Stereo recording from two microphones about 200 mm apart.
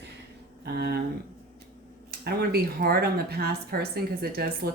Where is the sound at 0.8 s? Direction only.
50° right (ahead or behind).